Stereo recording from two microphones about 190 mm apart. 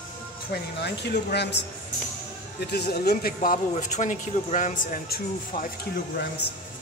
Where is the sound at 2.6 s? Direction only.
60° left (ahead or behind).